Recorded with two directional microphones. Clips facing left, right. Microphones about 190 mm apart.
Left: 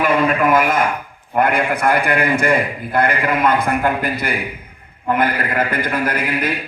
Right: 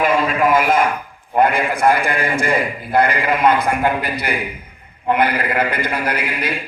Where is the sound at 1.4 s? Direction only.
60° left (ahead or behind).